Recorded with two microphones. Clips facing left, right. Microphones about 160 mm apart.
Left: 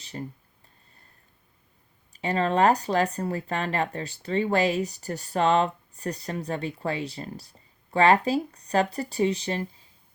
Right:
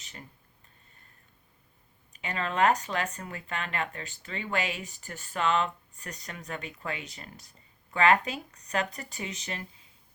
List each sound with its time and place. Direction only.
0.0 s speech: 35° left (ahead or behind)
2.1 s speech: 35° left (ahead or behind)